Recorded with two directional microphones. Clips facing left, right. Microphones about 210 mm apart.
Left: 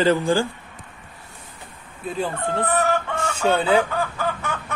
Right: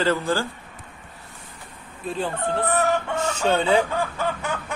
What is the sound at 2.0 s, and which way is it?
Speech, 10° left (ahead or behind).